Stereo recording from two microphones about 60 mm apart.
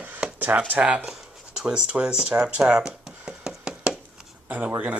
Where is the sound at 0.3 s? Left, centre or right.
Right.